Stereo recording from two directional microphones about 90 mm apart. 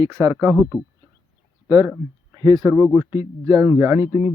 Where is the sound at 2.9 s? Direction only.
30° right (ahead or behind).